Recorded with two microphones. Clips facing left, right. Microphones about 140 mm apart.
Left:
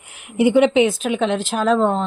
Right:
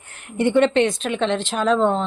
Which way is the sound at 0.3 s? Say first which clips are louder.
Left 3 dB; 5° left (ahead or behind).